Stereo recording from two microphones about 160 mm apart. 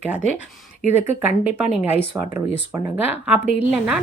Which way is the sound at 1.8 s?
10° right (ahead or behind).